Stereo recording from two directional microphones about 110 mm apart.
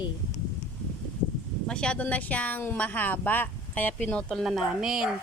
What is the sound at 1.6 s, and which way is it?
Speech, 10° left (ahead or behind).